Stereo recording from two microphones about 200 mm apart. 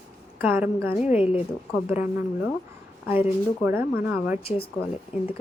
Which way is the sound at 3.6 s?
10° right (ahead or behind).